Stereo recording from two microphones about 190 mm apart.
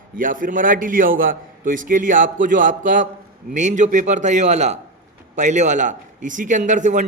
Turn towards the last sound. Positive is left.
turn(degrees=-40)  # may be behind; listen again after turning